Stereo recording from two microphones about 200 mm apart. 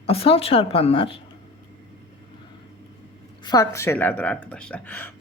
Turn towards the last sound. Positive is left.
turn(degrees=10)  # may be behind; listen again after turning